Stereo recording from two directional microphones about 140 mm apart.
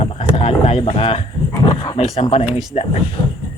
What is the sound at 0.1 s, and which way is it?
Dog, 45° left (ahead or behind).